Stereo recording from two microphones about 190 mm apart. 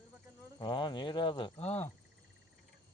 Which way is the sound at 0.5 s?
25° left (ahead or behind).